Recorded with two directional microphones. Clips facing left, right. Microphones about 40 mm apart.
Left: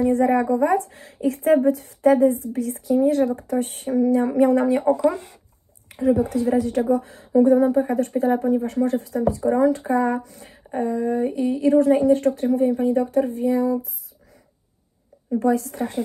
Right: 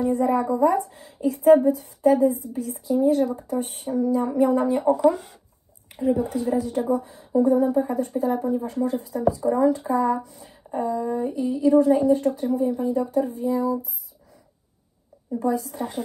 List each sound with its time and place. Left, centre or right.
0.0 s a woman's voice: left
0.3 s a woman's voice: left
6.0 s speech: left
6.9 s speech: left
7.7 s a woman's voice: left
10.2 s a woman's voice: left
15.3 s a woman's voice: left